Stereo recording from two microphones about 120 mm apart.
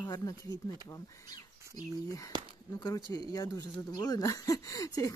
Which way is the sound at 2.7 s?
30° left (ahead or behind).